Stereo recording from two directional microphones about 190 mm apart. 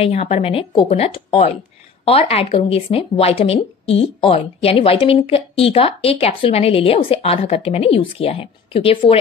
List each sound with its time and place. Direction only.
0.0 s speech: 35° left (ahead or behind)